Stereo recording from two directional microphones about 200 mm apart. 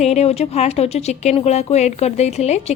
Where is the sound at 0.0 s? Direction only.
35° left (ahead or behind).